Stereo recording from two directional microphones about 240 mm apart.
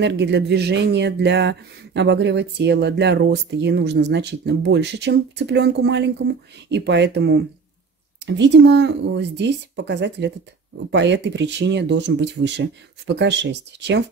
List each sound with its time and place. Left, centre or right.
0.0 s speech: right